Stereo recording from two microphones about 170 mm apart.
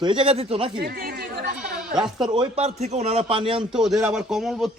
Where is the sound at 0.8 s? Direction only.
65° right (ahead or behind).